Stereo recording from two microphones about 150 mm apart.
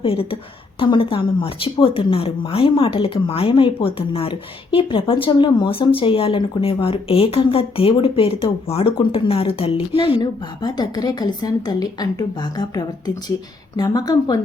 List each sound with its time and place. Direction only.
0.0 s a woman's voice: 40° left (ahead or behind)